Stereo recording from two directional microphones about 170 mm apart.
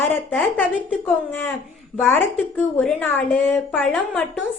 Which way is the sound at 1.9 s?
10° left (ahead or behind).